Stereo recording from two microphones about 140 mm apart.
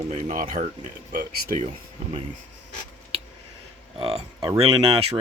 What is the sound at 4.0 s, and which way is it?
Speech, 45° right (ahead or behind).